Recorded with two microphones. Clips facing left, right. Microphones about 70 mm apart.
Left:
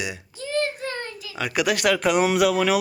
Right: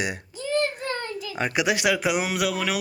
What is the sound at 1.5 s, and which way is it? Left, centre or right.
Speech, centre.